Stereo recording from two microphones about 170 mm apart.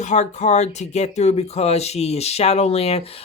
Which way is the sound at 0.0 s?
45° left (ahead or behind).